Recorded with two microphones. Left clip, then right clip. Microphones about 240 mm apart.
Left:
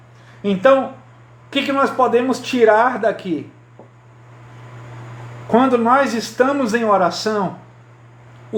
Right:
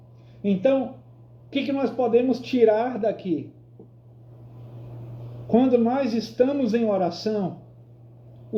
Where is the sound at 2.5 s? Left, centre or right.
Left.